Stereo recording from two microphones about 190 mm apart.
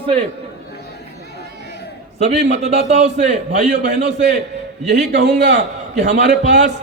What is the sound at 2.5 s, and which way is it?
Speech, 35° right (ahead or behind).